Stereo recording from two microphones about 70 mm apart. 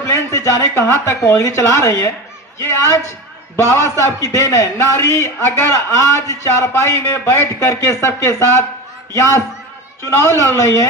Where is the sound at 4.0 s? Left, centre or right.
Left.